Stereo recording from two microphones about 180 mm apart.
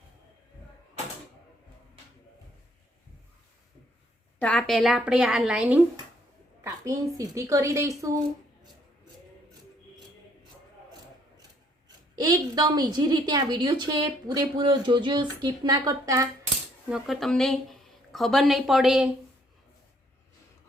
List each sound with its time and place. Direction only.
4.4 s a woman's voice: 5° left (ahead or behind)
6.7 s a woman's voice: 15° right (ahead or behind)
12.1 s a woman's voice: 20° right (ahead or behind)
16.9 s speech: centre (ahead or behind)